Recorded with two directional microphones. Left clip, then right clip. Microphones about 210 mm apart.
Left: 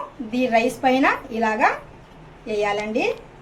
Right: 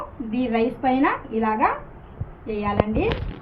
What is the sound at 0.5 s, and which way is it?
A woman's voice, 60° left (ahead or behind).